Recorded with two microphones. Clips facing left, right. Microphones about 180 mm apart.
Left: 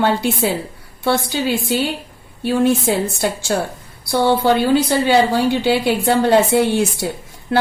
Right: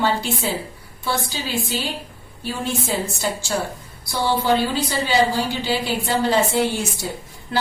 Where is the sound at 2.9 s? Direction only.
65° left (ahead or behind).